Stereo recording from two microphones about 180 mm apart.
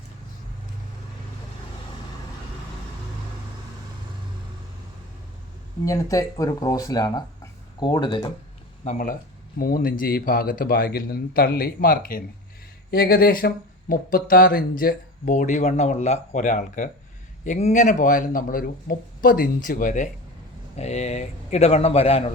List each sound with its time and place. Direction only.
5.8 s speech: 20° left (ahead or behind)
8.8 s a man's voice: 45° left (ahead or behind)